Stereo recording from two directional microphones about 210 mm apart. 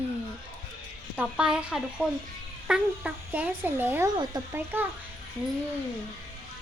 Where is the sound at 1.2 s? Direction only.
5° right (ahead or behind); by 4.6 s 20° right (ahead or behind).